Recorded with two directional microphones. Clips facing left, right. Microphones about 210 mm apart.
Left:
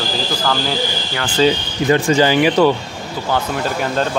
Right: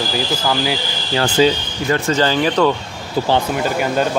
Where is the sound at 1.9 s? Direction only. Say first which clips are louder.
Left 3 dB; 10° left (ahead or behind).